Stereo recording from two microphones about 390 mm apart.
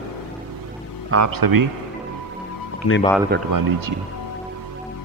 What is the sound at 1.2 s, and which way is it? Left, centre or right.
Speech, right.